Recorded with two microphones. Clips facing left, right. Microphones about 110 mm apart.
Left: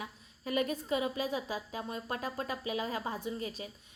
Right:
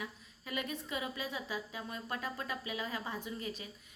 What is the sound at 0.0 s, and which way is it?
A woman's voice, 40° left (ahead or behind).